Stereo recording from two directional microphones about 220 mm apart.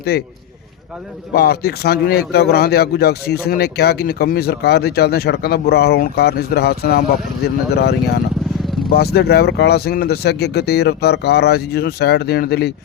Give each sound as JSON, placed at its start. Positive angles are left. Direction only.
{"t": 1.4, "sound": "speech", "side_deg": 45}